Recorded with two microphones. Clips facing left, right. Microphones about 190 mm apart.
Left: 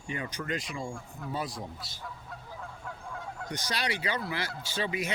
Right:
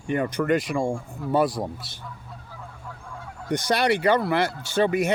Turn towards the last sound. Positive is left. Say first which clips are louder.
# right 11 dB
turn(degrees=-55)  # may be behind; listen again after turning